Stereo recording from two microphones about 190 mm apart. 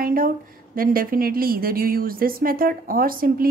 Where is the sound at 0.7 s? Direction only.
50° right (ahead or behind).